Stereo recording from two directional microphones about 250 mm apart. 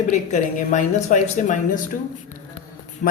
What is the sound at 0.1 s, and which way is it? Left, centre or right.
A woman's voice, left.